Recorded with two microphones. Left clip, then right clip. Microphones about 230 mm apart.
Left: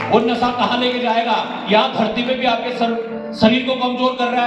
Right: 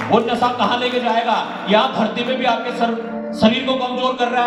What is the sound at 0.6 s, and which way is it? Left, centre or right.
A man's voice, right.